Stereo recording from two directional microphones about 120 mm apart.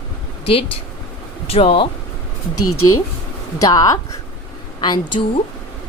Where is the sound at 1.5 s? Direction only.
50° left (ahead or behind).